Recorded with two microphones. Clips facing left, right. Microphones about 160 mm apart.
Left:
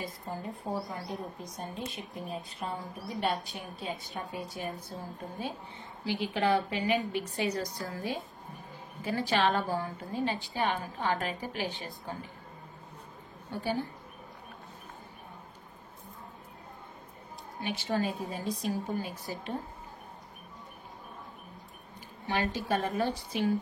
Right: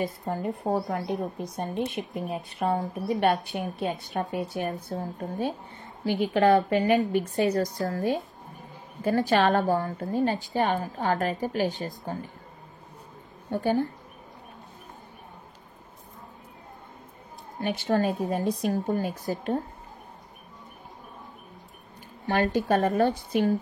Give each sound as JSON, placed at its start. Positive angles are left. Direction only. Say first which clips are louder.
{"t": 0.0, "sound": "a woman's voice", "louder": "right 9 dB", "side_deg": -70}
{"t": 4.9, "sound": "a woman's voice", "louder": "right 9 dB", "side_deg": -55}
{"t": 6.2, "sound": "a woman's voice", "louder": "right 8 dB", "side_deg": -50}
{"t": 13.5, "sound": "a woman's voice", "louder": "right 8 dB", "side_deg": -50}
{"t": 17.6, "sound": "a woman's voice", "louder": "right 6 dB", "side_deg": -50}
{"t": 18.9, "sound": "a woman's voice", "louder": "right 7 dB", "side_deg": -45}
{"t": 22.3, "sound": "a woman's voice", "louder": "right 7 dB", "side_deg": -50}